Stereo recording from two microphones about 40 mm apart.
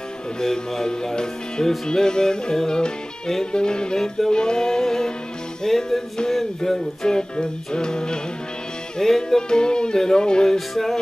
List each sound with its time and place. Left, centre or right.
0.4 s music: centre
10.7 s music: centre